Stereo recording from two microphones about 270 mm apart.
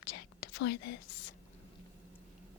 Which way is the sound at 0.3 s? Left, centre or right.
Left.